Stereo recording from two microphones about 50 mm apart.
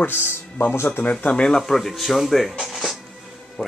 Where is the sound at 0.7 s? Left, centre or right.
Left.